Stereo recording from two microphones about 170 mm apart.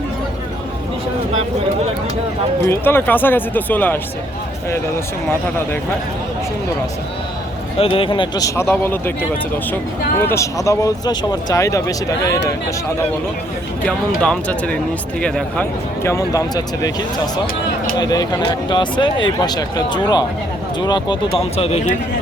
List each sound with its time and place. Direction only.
2.6 s speech: 10° left (ahead or behind)
7.8 s speech: 30° left (ahead or behind); by 9.1 s 10° left (ahead or behind)
10.2 s speech: 15° left (ahead or behind)
13.8 s speech: 5° left (ahead or behind)
16.0 s speech: 20° left (ahead or behind)
18.0 s speech: 25° left (ahead or behind); by 21.8 s 40° left (ahead or behind)